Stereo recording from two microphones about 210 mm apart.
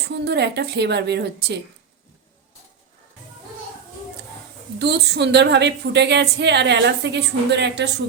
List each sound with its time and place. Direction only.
0.3 s a woman's voice: 55° right (ahead or behind)
4.8 s a woman's voice: 55° right (ahead or behind)